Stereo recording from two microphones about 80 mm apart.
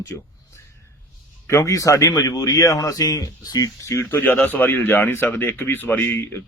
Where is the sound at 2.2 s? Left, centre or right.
Left.